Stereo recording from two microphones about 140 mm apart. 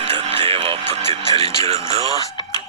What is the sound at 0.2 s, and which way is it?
Music, 50° right (ahead or behind).